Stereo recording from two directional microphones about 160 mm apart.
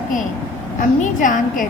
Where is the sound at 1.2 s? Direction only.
55° left (ahead or behind).